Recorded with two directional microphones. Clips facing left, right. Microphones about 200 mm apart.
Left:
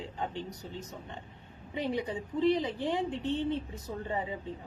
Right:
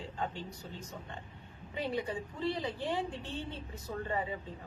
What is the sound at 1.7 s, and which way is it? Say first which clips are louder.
A woman's voice: left 3 dB; 20° left (ahead or behind).